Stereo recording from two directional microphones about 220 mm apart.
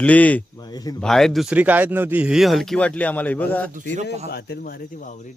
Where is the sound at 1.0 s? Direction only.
Centre (ahead or behind).